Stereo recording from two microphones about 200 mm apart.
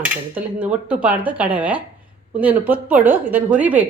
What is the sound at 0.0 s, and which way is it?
A woman's voice, 10° right (ahead or behind).